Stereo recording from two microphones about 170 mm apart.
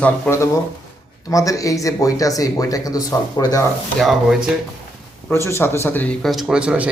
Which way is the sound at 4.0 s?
Centre (ahead or behind).